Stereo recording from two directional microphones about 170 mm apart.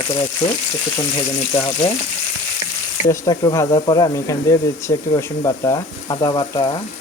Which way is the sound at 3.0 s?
20° left (ahead or behind).